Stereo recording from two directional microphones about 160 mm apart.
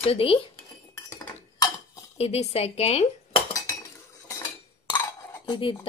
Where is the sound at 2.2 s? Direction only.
40° left (ahead or behind).